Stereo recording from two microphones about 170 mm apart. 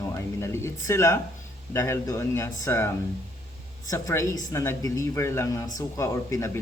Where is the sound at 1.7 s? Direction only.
15° left (ahead or behind).